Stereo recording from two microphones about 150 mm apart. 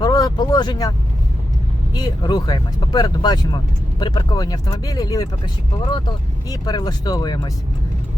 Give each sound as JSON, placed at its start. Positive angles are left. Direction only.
{"t": 0.0, "sound": "vehicle", "side_deg": 25}
{"t": 1.9, "sound": "speech", "side_deg": 30}
{"t": 6.5, "sound": "speech", "side_deg": 25}